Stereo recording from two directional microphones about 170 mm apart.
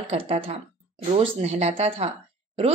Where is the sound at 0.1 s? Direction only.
35° right (ahead or behind).